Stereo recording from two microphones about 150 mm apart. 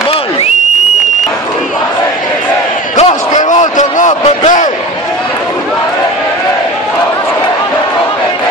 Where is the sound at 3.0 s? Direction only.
50° left (ahead or behind).